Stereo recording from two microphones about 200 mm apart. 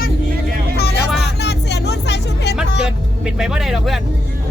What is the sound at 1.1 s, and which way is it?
Music, 60° left (ahead or behind).